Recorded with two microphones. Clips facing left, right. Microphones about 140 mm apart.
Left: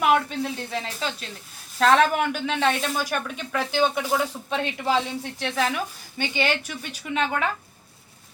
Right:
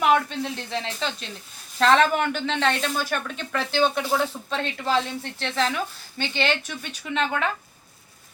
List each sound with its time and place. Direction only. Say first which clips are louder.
0.0 s speech: even; 5° left (ahead or behind)